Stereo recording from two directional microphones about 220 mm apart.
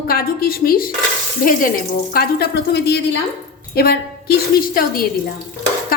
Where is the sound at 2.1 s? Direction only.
45° left (ahead or behind).